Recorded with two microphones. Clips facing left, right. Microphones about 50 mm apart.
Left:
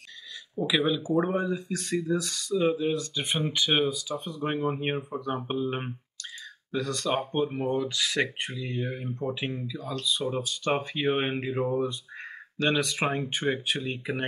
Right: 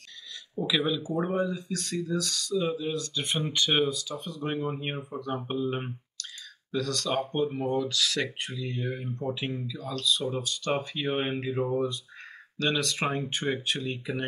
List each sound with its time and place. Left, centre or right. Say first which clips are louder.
0.6 s speech: left 2 dB; centre
4.3 s speech: left 2 dB; centre